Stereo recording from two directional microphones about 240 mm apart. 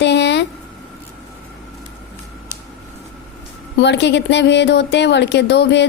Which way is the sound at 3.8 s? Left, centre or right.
Left.